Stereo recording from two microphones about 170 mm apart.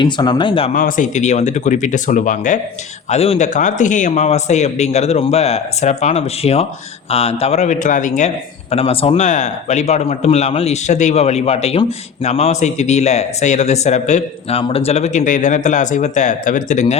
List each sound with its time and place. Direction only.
0.0 s speech: 25° left (ahead or behind)
0.7 s a man's voice: 50° left (ahead or behind)
8.7 s a man's voice: 35° left (ahead or behind)